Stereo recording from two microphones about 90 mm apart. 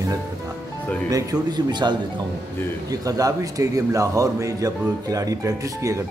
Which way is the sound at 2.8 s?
40° right (ahead or behind).